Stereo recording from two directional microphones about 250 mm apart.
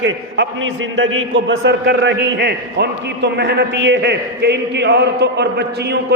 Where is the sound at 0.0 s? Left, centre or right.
Right.